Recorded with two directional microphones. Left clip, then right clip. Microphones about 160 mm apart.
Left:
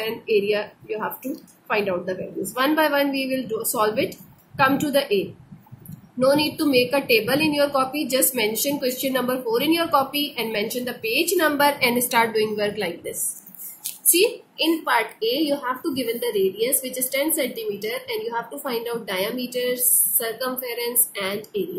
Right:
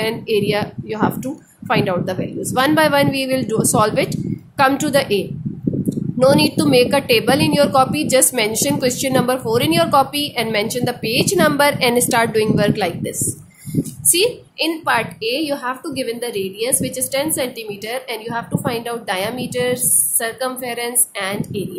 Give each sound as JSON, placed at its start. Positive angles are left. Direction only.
{"t": 0.0, "sound": "a woman's voice", "side_deg": -55}
{"t": 14.1, "sound": "a woman's voice", "side_deg": -60}